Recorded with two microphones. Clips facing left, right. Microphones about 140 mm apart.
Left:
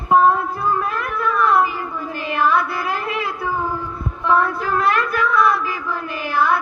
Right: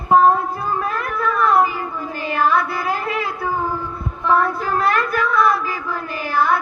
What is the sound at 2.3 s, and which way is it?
Carnatic music, 40° right (ahead or behind).